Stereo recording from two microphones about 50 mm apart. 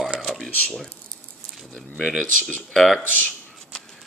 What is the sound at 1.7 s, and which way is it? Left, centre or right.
Speech, centre.